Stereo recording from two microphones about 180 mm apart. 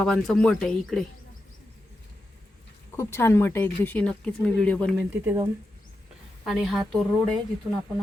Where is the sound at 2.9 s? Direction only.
15° left (ahead or behind).